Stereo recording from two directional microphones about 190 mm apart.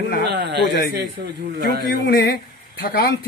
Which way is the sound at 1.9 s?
55° left (ahead or behind).